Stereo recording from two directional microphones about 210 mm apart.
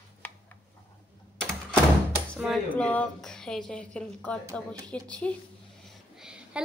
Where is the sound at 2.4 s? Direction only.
Centre (ahead or behind).